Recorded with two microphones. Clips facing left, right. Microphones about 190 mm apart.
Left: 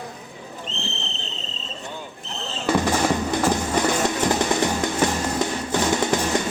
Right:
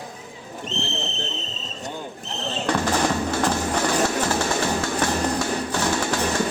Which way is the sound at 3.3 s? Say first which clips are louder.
Left 2 dB; 20° left (ahead or behind).